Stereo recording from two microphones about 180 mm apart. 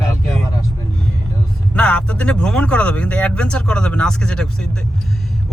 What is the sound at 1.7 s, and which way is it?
Speech, 5° left (ahead or behind).